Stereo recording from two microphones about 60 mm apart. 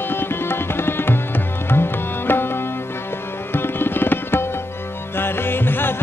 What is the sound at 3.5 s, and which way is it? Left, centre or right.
Tabla, left.